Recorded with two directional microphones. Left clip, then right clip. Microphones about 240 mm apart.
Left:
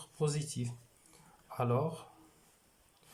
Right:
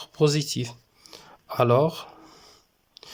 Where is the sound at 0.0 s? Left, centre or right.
Right.